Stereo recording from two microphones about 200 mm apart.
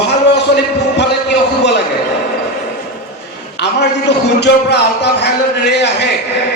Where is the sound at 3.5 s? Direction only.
60° left (ahead or behind).